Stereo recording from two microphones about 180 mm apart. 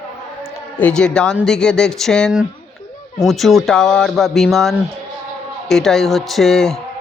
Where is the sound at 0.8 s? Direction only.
5° left (ahead or behind).